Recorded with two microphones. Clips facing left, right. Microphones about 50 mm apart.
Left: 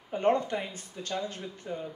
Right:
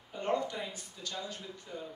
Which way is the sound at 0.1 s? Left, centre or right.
Left.